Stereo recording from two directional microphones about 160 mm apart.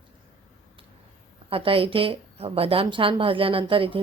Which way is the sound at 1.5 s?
35° right (ahead or behind).